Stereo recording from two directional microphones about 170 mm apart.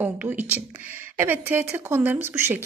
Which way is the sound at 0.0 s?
10° right (ahead or behind).